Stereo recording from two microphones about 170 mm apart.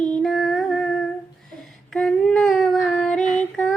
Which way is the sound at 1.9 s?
5° left (ahead or behind).